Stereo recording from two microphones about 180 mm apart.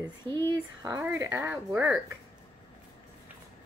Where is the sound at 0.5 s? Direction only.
15° right (ahead or behind).